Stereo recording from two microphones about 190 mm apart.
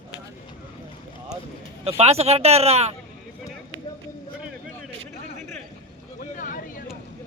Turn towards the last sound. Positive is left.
turn(degrees=45)  # may be behind; listen again after turning